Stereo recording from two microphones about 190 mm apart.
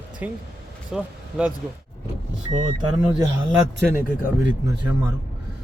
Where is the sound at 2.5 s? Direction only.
25° right (ahead or behind).